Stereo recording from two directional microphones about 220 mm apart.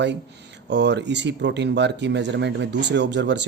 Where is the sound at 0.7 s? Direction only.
50° right (ahead or behind).